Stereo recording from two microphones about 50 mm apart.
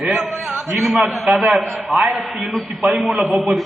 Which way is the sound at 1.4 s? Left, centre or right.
Centre.